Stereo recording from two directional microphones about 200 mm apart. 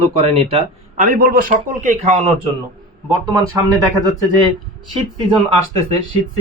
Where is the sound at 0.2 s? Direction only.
30° right (ahead or behind).